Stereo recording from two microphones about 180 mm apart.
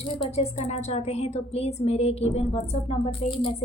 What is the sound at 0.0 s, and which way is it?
A woman's voice, 35° left (ahead or behind).